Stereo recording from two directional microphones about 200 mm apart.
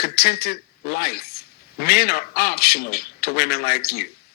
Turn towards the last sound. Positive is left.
turn(degrees=50)  # may be behind; listen again after turning